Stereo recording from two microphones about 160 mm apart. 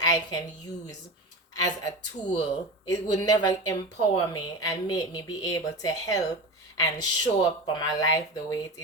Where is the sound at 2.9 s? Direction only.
25° left (ahead or behind).